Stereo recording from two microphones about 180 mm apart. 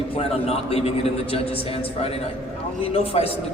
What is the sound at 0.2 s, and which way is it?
A man's voice, 35° left (ahead or behind).